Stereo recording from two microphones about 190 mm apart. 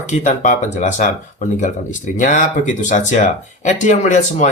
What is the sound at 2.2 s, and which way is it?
Speech, 40° left (ahead or behind).